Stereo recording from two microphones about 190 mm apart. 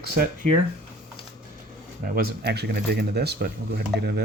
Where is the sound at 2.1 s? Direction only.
55° right (ahead or behind).